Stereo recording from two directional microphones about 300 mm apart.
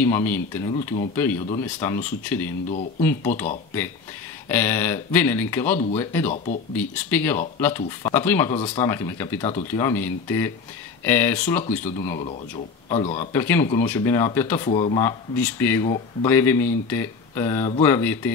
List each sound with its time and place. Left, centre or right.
0.0 s speech: centre
4.5 s speech: centre
6.3 s speech: left
6.7 s speech: centre
12.9 s speech: left
13.3 s speech: centre
14.7 s speech: centre